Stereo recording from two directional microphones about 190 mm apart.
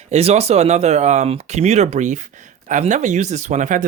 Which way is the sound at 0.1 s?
35° right (ahead or behind).